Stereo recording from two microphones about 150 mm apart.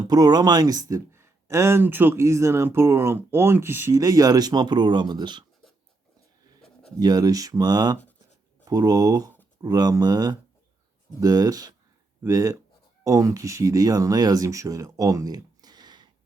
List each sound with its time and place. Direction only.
0.1 s a man's voice: 25° right (ahead or behind)
7.0 s a man's voice: 25° right (ahead or behind)